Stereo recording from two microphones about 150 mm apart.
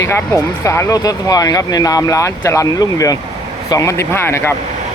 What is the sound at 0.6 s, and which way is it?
A man's voice, 15° left (ahead or behind).